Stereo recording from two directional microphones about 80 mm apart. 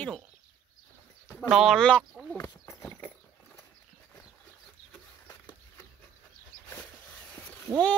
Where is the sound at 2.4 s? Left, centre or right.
Left.